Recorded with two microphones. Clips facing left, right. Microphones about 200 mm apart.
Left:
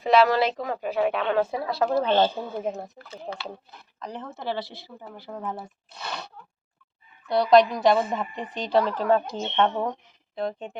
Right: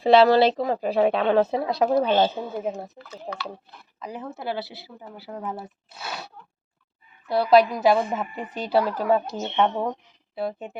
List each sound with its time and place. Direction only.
0.0 s a woman's voice: 30° right (ahead or behind)
2.0 s speech: 5° right (ahead or behind)
3.1 s speech: 25° left (ahead or behind)
4.0 s speech: 10° right (ahead or behind)